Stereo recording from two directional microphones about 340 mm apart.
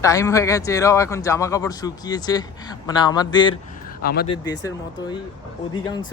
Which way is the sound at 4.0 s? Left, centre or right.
Left.